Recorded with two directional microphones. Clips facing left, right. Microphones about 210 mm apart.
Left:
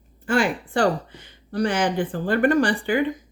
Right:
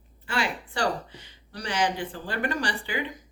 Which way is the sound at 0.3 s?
50° left (ahead or behind).